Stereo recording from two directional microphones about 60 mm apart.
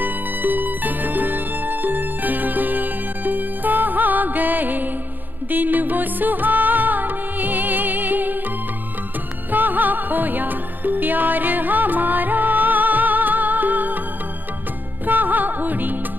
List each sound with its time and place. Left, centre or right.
0.0 s music: right
9.5 s music: right
15.0 s music: right